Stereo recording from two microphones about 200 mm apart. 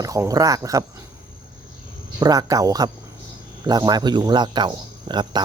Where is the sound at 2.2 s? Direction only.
20° right (ahead or behind).